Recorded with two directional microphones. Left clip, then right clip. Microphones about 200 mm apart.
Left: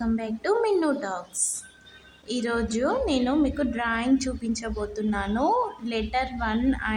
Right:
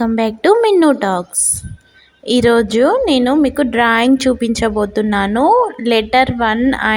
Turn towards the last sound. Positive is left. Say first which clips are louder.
# right 12 dB
turn(degrees=-40)  # may be behind; listen again after turning